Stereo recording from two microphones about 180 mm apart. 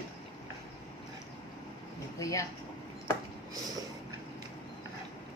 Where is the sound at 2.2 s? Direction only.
20° left (ahead or behind).